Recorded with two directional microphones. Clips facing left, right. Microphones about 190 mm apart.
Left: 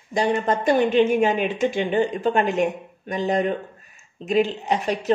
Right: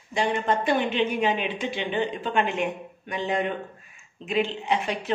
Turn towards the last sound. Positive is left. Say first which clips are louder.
# left 3 dB
turn(degrees=40)  # may be behind; listen again after turning